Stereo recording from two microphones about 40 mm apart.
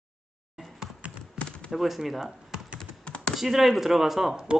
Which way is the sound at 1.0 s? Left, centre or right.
Right.